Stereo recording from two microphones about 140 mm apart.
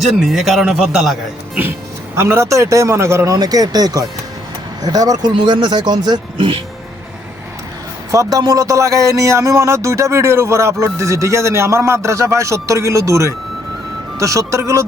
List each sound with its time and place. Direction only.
0.0 s a man's voice: centre (ahead or behind)
2.1 s speech: 20° right (ahead or behind); by 6.6 s 40° right (ahead or behind)
8.1 s speech: 25° right (ahead or behind)